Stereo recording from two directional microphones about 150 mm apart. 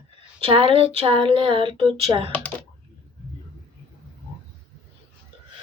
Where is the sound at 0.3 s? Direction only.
35° right (ahead or behind).